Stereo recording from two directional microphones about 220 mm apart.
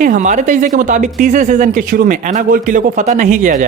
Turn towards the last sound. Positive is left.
turn(degrees=-35)  # may be behind; listen again after turning